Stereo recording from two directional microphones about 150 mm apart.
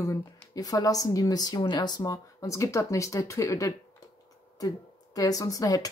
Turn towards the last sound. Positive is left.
turn(degrees=25)  # may be behind; listen again after turning